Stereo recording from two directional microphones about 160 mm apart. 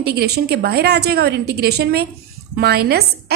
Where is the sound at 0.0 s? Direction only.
80° right.